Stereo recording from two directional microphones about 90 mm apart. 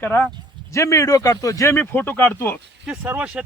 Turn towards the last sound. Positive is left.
turn(degrees=-20)  # may be behind; listen again after turning